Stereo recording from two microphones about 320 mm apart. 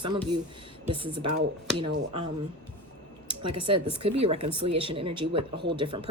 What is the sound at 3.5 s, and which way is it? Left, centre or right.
Speech, centre.